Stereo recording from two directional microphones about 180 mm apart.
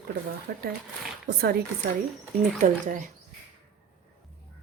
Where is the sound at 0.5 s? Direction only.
60° right (ahead or behind).